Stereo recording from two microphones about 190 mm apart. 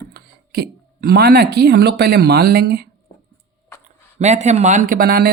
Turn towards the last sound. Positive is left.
turn(degrees=-50)  # may be behind; listen again after turning